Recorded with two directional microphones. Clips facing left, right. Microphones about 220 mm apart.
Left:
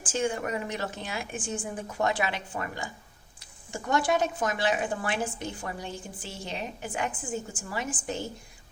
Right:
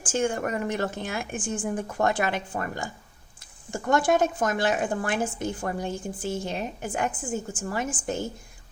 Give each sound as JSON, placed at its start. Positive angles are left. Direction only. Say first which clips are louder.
{"t": 0.0, "sound": "a woman's voice", "louder": "right 3 dB", "side_deg": -50}